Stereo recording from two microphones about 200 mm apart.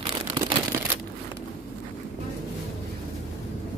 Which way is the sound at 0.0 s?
25° right (ahead or behind).